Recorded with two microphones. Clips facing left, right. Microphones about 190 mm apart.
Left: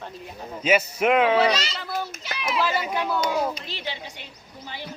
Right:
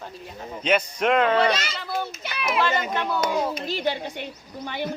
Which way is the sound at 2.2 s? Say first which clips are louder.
Right 2 dB; 55° right (ahead or behind).